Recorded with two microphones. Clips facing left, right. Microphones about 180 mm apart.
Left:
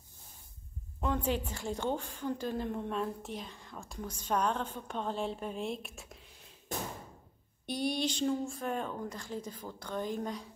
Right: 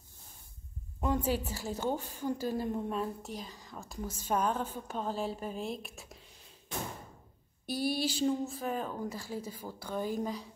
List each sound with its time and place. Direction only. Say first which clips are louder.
1.0 s a woman's voice: right 1 dB; 10° right (ahead or behind)
7.6 s speech: right 1 dB; 5° right (ahead or behind)